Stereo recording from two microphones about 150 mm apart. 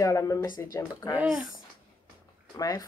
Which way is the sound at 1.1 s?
5° right (ahead or behind).